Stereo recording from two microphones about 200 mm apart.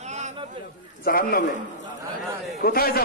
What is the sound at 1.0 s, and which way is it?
Speech, 50° left (ahead or behind).